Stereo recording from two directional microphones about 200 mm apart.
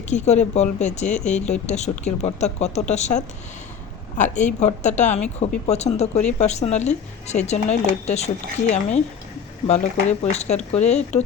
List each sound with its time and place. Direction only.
0.1 s speech: 35° left (ahead or behind)
9.6 s speech: 35° left (ahead or behind)